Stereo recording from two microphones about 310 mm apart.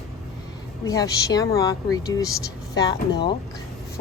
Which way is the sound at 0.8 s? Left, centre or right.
Centre.